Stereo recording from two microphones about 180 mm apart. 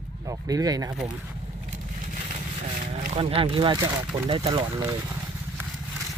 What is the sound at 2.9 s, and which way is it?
Speech, 35° right (ahead or behind).